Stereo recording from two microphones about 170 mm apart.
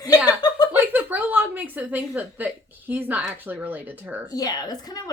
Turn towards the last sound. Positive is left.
turn(degrees=20)  # may be behind; listen again after turning